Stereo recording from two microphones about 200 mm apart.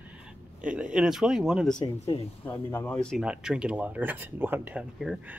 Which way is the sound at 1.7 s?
30° left (ahead or behind).